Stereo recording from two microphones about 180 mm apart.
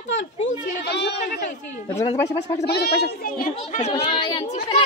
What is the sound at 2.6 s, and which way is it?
A child's voice, 65° left (ahead or behind).